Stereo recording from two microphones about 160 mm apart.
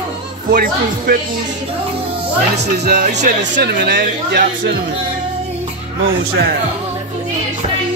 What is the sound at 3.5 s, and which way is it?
Speech, 90° right.